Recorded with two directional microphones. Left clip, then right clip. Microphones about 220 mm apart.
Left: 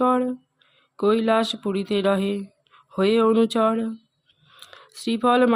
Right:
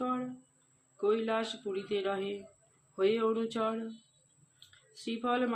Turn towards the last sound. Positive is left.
turn(degrees=55)  # may be behind; listen again after turning